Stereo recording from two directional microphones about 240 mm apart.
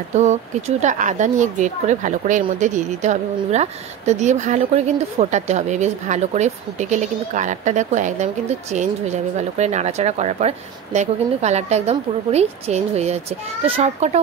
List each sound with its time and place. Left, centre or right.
0.1 s speech: right